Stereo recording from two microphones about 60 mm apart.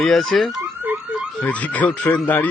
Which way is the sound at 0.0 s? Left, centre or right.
Centre.